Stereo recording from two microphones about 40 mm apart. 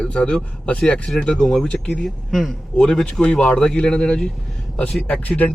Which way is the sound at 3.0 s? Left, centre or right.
Left.